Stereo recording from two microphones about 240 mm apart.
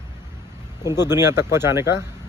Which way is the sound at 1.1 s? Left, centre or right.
Centre.